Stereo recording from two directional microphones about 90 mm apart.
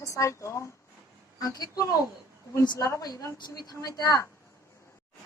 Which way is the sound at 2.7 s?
35° left (ahead or behind).